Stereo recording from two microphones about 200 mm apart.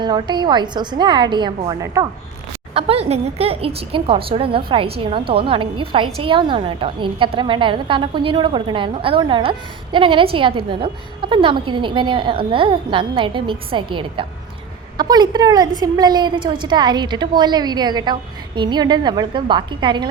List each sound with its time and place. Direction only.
0.0 s a woman's voice: 20° right (ahead or behind)
2.7 s a woman's voice: 30° right (ahead or behind)